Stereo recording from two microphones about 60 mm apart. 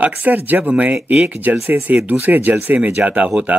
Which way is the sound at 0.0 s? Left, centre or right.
Right.